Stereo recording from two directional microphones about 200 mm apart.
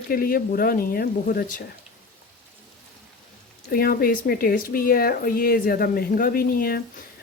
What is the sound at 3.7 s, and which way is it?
Speech, 45° left (ahead or behind).